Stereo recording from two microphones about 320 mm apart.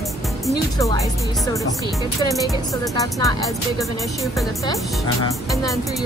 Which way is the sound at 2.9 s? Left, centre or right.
Centre.